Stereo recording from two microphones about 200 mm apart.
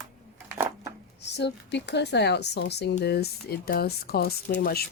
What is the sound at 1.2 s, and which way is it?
Speech, 60° left (ahead or behind).